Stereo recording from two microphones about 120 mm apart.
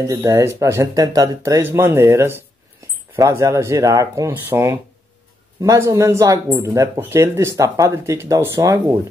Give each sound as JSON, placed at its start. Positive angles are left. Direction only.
{"t": 0.0, "sound": "speech", "side_deg": -25}